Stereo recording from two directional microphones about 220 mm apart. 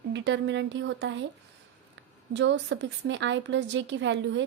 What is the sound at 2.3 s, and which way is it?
A woman's voice, 55° right (ahead or behind).